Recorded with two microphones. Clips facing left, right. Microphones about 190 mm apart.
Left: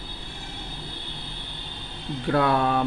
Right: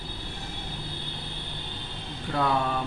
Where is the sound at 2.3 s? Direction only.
65° left (ahead or behind).